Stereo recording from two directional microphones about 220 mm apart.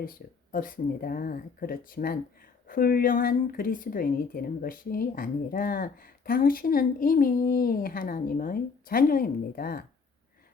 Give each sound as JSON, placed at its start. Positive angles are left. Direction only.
{"t": 0.0, "sound": "speech", "side_deg": 40}